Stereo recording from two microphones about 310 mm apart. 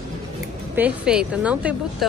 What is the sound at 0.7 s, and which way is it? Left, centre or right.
A woman's voice, centre.